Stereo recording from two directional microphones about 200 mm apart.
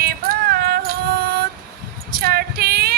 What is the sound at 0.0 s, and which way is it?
Music, 50° right (ahead or behind).